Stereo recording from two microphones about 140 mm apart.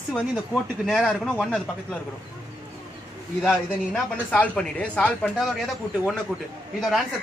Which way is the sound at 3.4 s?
Centre (ahead or behind).